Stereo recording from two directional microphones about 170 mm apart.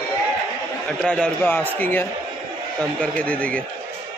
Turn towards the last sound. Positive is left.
turn(degrees=5)  # may be behind; listen again after turning